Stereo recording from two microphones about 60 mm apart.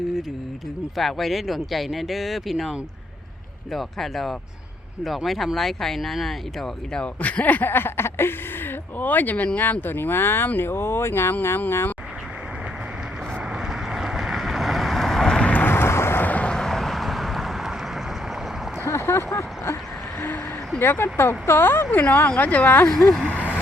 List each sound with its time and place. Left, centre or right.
0.9 s speech: centre
6.9 s speech: left
13.4 s boat: centre
15.6 s vehicle: left
16.2 s vehicle: left
16.5 s vehicle: centre
18.9 s a sound: left
20.1 s a sound: left
20.7 s speech: left